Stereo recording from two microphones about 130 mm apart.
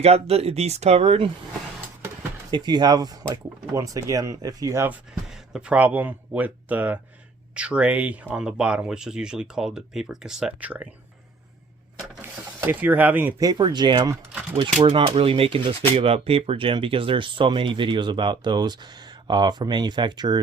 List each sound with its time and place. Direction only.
0.0 s speech: 50° right (ahead or behind)
2.5 s speech: 35° right (ahead or behind)
4.9 s speech: 5° right (ahead or behind)
12.2 s speech: 15° right (ahead or behind)
13.4 s speech: 30° right (ahead or behind)
14.8 s speech: 45° right (ahead or behind)